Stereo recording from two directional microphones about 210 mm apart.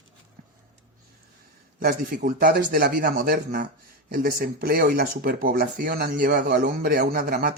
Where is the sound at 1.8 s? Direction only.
40° right (ahead or behind).